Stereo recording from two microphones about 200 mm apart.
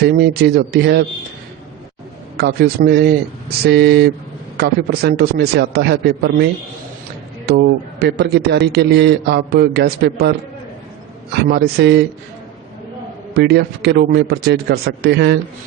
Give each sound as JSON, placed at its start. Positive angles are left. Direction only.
{"t": 0.0, "sound": "speech", "side_deg": -50}
{"t": 2.4, "sound": "a man's voice", "side_deg": -50}
{"t": 11.4, "sound": "a man's voice", "side_deg": -55}
{"t": 13.3, "sound": "a man's voice", "side_deg": -55}